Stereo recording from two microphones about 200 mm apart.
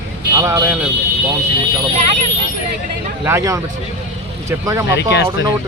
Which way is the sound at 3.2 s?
15° right (ahead or behind).